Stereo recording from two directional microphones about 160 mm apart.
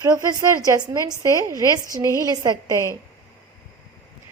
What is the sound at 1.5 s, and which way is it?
Speech, 20° left (ahead or behind).